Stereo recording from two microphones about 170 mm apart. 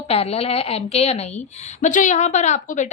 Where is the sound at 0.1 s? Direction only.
35° left (ahead or behind).